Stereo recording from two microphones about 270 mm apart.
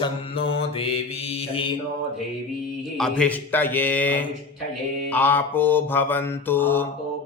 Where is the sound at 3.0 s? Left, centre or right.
Centre.